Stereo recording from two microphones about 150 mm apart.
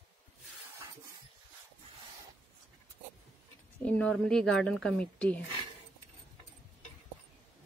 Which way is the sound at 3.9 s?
5° left (ahead or behind).